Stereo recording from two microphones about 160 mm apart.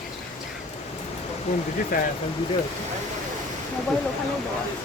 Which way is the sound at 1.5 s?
45° left (ahead or behind).